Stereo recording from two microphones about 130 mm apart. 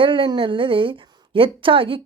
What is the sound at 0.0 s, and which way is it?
A woman's voice, 40° right (ahead or behind).